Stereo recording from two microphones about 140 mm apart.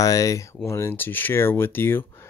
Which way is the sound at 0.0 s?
25° left (ahead or behind).